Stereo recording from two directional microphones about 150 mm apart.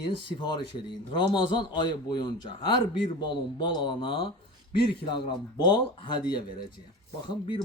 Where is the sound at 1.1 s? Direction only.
30° left (ahead or behind).